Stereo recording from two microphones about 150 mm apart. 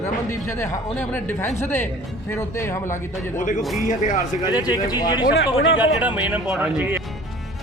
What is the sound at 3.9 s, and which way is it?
Speech, 55° left (ahead or behind).